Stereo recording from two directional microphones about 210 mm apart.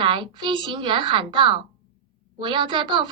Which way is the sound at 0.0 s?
20° right (ahead or behind).